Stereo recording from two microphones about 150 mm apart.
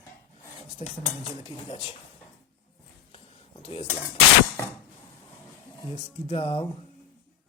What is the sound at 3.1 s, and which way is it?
Dishes, 40° left (ahead or behind).